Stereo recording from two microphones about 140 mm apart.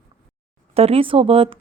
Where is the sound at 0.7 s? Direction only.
45° right (ahead or behind).